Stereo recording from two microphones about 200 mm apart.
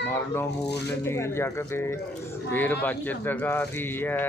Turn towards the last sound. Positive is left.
turn(degrees=10)  # may be behind; listen again after turning